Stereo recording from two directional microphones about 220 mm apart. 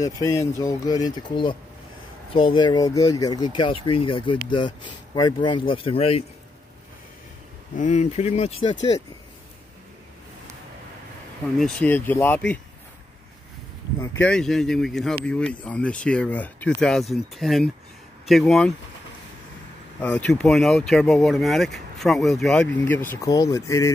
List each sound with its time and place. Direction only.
0.0 s speech: 15° left (ahead or behind)
7.7 s speech: 35° left (ahead or behind)
11.5 s speech: 5° left (ahead or behind)
14.0 s speech: 5° left (ahead or behind)
20.0 s speech: 5° left (ahead or behind)